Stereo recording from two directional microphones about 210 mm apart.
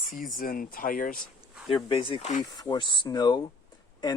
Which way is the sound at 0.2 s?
40° left (ahead or behind).